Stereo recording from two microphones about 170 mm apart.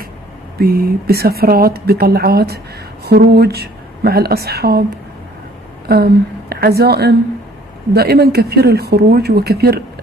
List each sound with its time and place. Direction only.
0.6 s speech: 65° right (ahead or behind)
5.9 s speech: 70° right (ahead or behind)